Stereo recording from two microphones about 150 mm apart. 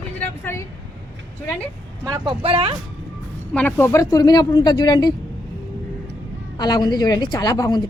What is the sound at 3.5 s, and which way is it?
A woman's voice, 10° left (ahead or behind).